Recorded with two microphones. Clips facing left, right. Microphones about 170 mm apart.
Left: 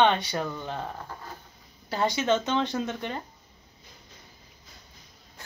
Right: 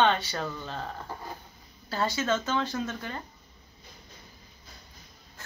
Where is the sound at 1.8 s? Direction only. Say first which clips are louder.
Left 3 dB; 20° left (ahead or behind).